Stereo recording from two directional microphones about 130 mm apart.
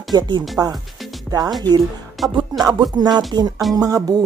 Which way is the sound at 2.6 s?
30° right (ahead or behind).